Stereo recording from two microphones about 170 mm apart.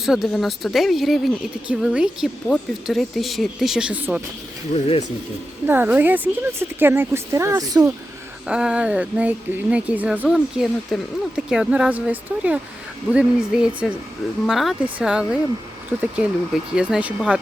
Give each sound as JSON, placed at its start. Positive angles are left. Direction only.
{"t": 0.0, "sound": "speech", "side_deg": 0}
{"t": 4.7, "sound": "speech", "side_deg": 35}
{"t": 5.6, "sound": "speech", "side_deg": -10}
{"t": 8.4, "sound": "speech", "side_deg": -5}
{"t": 16.7, "sound": "speech", "side_deg": -5}